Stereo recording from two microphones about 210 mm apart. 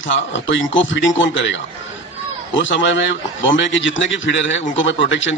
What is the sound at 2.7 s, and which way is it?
A man's voice, 60° left (ahead or behind).